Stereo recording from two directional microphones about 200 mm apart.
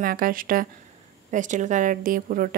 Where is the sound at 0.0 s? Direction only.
45° right (ahead or behind).